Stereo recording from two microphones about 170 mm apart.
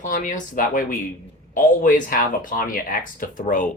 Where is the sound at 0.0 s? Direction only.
50° left (ahead or behind).